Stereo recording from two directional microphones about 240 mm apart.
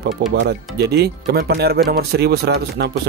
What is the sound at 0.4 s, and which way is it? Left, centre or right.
Speech, right.